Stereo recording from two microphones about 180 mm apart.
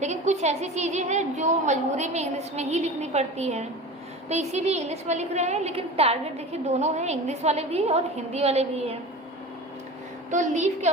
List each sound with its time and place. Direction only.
0.0 s a woman's voice: 40° right (ahead or behind)
10.3 s a woman's voice: 40° right (ahead or behind)